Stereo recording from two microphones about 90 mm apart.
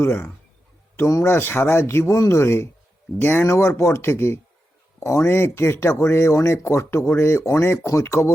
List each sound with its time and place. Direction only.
0.0 s speech: 20° left (ahead or behind)